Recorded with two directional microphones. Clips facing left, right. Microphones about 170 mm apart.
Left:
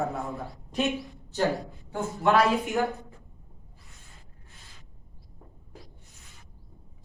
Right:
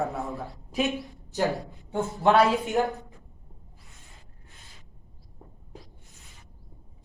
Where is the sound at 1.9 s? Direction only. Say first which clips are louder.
Right 3 dB; 25° right (ahead or behind).